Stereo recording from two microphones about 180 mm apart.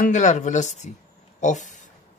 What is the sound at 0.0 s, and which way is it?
Speech, 45° left (ahead or behind).